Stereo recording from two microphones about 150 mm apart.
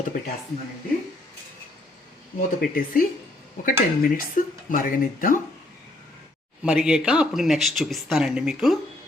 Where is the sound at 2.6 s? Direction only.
70° left (ahead or behind).